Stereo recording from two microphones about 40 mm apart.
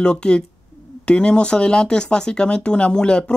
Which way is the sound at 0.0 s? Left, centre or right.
Left.